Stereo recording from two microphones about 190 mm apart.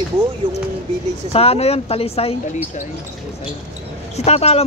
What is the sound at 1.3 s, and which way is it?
Speech, 30° left (ahead or behind).